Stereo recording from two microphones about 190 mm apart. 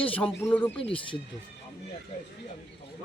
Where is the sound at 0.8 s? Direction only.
30° left (ahead or behind).